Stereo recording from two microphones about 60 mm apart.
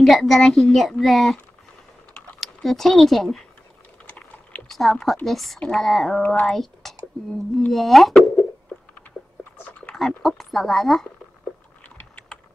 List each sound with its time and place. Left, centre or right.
0.0 s a child's voice: centre
2.4 s speech: centre
4.0 s a sound: left
4.6 s a child's voice: centre
6.2 s speech: left
6.5 s speech: centre
9.4 s whispering: left
9.9 s speech: centre
11.8 s typing: left